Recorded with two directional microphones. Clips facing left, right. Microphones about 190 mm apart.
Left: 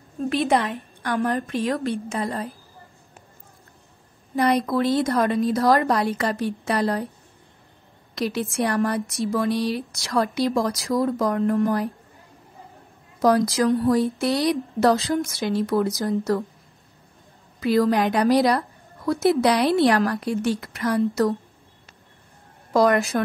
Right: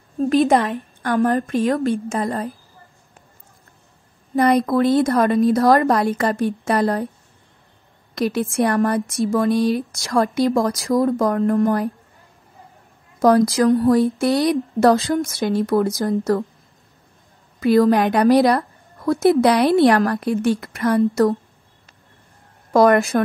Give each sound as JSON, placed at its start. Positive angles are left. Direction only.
{"t": 0.3, "sound": "speech", "side_deg": -45}
{"t": 4.4, "sound": "speech", "side_deg": -50}
{"t": 8.1, "sound": "speech", "side_deg": -50}
{"t": 13.2, "sound": "speech", "side_deg": -50}
{"t": 17.6, "sound": "a woman's voice", "side_deg": -50}
{"t": 22.7, "sound": "a woman's voice", "side_deg": -55}